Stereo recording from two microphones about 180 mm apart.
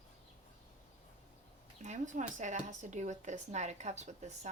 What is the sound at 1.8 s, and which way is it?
Speech, 40° right (ahead or behind).